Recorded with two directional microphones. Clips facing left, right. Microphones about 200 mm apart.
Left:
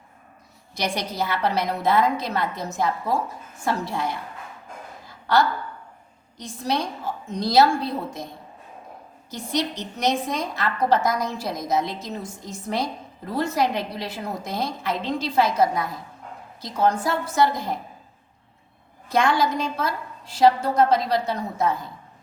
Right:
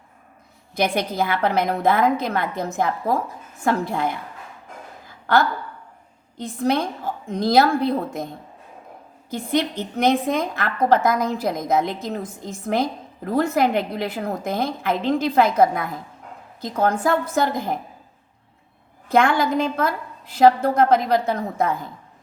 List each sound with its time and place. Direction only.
0.9 s a woman's voice: 55° right (ahead or behind)
5.0 s a sound: 55° right (ahead or behind)
6.6 s a woman's voice: 55° right (ahead or behind)
9.6 s a woman's voice: 55° right (ahead or behind)
19.1 s a woman's voice: 55° right (ahead or behind)